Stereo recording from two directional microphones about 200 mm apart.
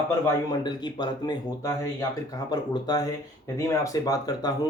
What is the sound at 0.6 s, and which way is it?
Speech, 20° left (ahead or behind).